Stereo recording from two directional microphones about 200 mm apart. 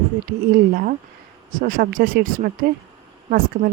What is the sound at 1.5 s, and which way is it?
A woman's voice, 40° right (ahead or behind).